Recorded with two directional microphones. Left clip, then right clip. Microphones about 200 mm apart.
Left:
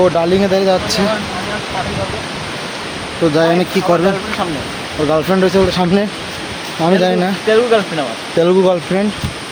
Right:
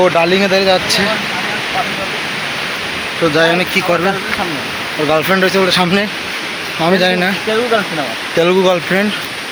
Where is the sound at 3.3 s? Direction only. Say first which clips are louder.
Right 1 dB; 25° left (ahead or behind).